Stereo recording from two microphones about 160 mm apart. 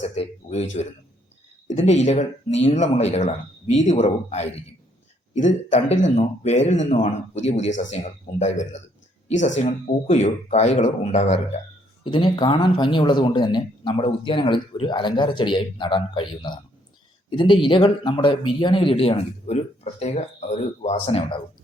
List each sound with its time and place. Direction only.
0.0 s speech: 40° left (ahead or behind)
9.8 s speech: 45° left (ahead or behind)
12.0 s speech: 30° left (ahead or behind)